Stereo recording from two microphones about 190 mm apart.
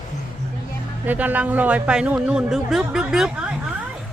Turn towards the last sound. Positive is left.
turn(degrees=-5)  # may be behind; listen again after turning